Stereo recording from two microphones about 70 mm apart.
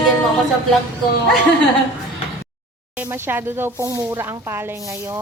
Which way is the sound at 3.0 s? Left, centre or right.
Right.